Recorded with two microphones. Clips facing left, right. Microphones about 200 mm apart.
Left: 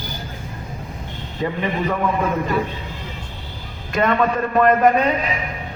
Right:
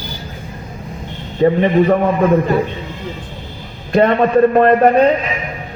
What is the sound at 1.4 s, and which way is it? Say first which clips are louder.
Speech: right 12 dB; 35° right (ahead or behind).